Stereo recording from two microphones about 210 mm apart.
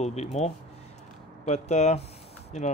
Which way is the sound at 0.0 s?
30° left (ahead or behind).